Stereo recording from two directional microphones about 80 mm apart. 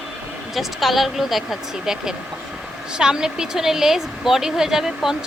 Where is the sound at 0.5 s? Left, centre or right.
Centre.